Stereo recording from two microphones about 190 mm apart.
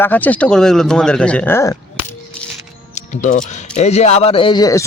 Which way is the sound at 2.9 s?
40° left (ahead or behind).